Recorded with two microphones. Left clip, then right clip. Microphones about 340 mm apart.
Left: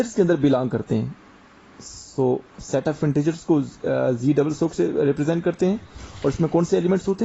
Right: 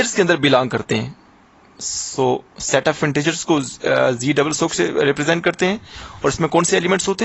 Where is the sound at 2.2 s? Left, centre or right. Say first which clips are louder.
Right 3 dB; right.